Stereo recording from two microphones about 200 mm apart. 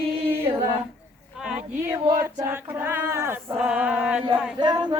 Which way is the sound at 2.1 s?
15° right (ahead or behind).